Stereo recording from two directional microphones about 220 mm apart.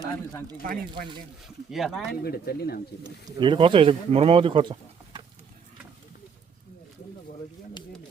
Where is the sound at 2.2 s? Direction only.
45° left (ahead or behind).